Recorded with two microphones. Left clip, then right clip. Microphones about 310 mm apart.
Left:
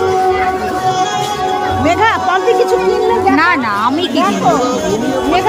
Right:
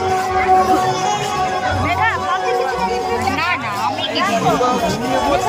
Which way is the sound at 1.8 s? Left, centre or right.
Centre.